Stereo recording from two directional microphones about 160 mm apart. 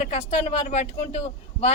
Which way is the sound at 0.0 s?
35° left (ahead or behind).